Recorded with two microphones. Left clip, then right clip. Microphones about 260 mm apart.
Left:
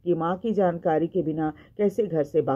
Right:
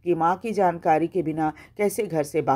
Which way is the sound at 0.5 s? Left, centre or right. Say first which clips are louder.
Right 1 dB; right.